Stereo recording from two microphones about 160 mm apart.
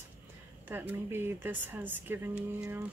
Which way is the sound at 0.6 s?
10° right (ahead or behind).